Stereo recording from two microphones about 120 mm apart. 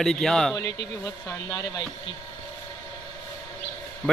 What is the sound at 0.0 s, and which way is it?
Speech, 5° left (ahead or behind).